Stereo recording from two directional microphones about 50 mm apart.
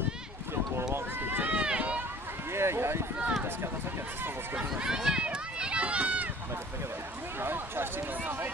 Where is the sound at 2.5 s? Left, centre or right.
Right.